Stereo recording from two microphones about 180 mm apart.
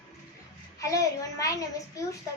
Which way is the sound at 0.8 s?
20° left (ahead or behind).